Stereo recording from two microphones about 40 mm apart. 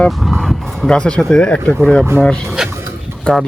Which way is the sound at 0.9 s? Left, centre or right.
Left.